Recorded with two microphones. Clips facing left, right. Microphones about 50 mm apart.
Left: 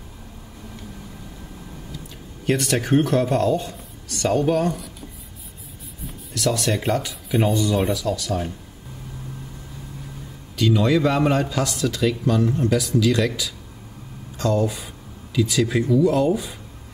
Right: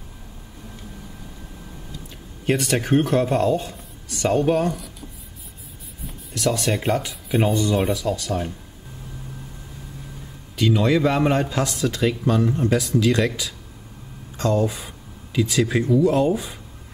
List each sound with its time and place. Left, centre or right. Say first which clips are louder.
2.4 s speech: even; centre
6.3 s speech: even; centre
10.5 s speech: even; centre
14.4 s speech: even; centre
16.3 s speech: left 1 dB; centre